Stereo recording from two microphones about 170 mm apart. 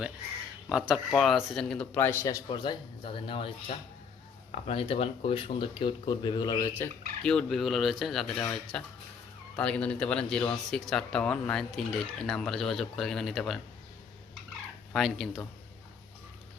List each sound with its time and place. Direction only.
0.7 s a man's voice: 5° right (ahead or behind); by 6.8 s 20° left (ahead or behind)
7.2 s speech: 5° left (ahead or behind)
14.9 s speech: centre (ahead or behind)